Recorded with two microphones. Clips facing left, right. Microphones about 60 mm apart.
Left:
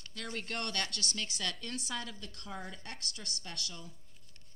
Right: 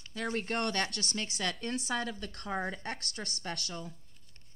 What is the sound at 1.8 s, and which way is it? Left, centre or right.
Speech, right.